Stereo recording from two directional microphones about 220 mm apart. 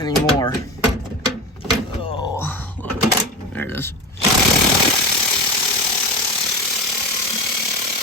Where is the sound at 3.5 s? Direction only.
10° left (ahead or behind).